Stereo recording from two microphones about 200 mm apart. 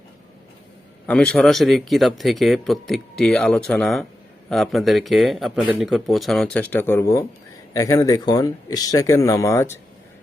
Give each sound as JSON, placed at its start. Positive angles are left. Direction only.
{"t": 1.0, "sound": "speech", "side_deg": 5}